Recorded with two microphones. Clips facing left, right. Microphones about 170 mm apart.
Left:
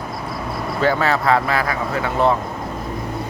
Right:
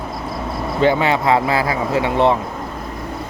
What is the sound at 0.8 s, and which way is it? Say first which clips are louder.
Speech: right 3 dB; 25° right (ahead or behind).